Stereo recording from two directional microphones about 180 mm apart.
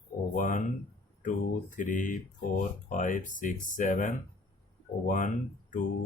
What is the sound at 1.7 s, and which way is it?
Speech, 45° left (ahead or behind).